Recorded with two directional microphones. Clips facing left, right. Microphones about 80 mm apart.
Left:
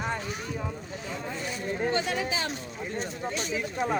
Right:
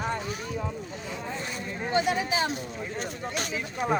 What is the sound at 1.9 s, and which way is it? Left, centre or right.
Speech, centre.